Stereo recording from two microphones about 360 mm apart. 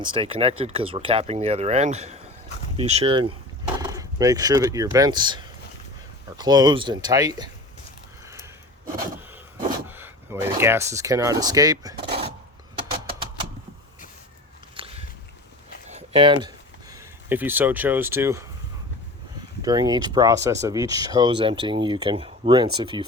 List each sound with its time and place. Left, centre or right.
0.1 s speech: centre
9.9 s speech: centre
14.8 s a sound: centre
17.2 s speech: centre
19.6 s speech: centre